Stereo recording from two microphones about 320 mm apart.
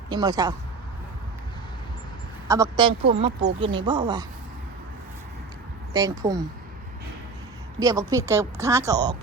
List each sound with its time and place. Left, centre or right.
0.1 s speech: centre
2.5 s speech: centre
5.9 s speech: centre
7.8 s speech: centre